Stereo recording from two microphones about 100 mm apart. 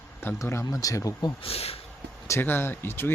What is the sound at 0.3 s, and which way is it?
Speech, 30° left (ahead or behind).